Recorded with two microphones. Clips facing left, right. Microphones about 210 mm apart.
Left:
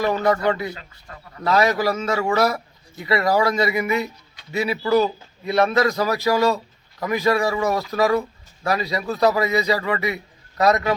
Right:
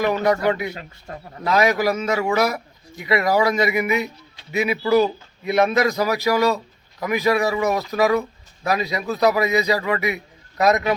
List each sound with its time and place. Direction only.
0.0 s speech: 15° right (ahead or behind)
0.8 s speech: 30° right (ahead or behind)
1.5 s speech: 15° right (ahead or behind)